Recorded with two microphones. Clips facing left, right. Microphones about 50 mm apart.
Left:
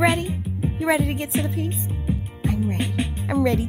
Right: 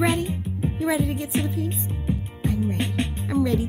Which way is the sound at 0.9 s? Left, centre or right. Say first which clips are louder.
Left 3 dB; left.